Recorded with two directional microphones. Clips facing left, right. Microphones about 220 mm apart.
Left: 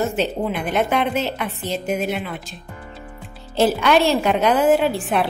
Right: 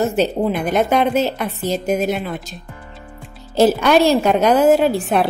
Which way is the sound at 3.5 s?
40° right (ahead or behind).